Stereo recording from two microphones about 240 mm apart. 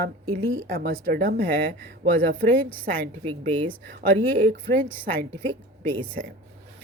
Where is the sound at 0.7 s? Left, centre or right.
Right.